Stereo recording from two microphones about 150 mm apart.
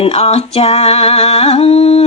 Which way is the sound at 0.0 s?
40° left (ahead or behind).